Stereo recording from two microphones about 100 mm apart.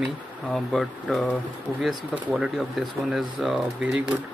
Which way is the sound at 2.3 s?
Centre (ahead or behind).